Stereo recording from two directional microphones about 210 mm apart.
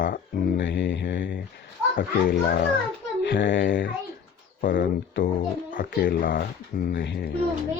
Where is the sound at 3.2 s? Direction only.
55° left (ahead or behind).